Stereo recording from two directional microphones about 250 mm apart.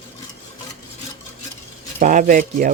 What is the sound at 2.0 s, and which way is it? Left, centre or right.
Speech, right.